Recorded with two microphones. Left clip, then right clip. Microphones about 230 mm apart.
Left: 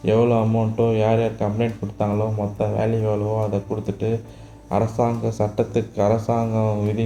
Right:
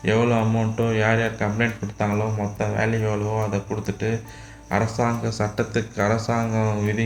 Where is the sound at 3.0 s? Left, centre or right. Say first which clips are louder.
Left 2 dB; right.